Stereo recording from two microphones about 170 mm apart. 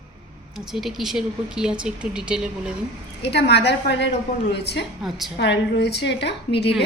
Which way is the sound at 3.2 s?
80° left.